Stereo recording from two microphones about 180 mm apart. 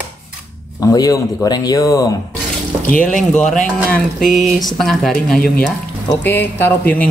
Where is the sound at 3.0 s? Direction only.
5° left (ahead or behind).